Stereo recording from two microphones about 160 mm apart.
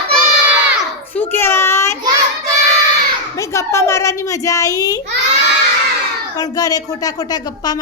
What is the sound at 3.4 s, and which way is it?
A woman's voice, 20° left (ahead or behind).